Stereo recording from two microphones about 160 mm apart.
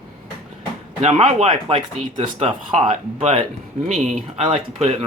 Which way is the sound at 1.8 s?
30° right (ahead or behind).